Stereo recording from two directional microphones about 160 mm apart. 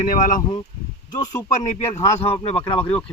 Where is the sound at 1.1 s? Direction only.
25° left (ahead or behind).